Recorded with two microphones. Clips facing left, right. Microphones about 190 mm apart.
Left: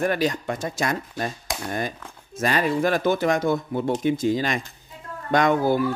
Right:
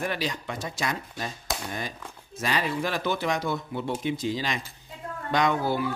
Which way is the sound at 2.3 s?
50° left (ahead or behind).